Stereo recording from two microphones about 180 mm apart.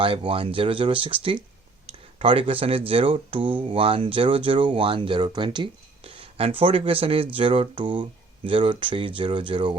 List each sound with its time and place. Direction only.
0.0 s speech: 30° right (ahead or behind)